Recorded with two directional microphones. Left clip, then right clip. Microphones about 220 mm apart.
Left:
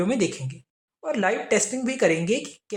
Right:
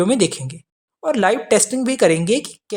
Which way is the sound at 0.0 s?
40° right (ahead or behind).